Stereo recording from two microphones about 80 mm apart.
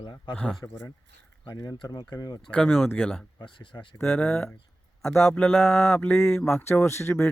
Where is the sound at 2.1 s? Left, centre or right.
Left.